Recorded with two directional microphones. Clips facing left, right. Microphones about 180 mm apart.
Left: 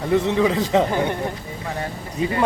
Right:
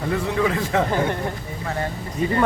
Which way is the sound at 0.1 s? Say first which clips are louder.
Left 4 dB; 20° left (ahead or behind).